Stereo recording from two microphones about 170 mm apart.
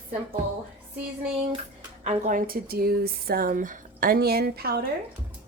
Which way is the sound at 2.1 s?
50° right (ahead or behind).